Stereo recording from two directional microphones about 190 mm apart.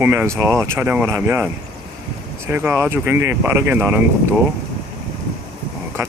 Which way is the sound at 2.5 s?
10° right (ahead or behind).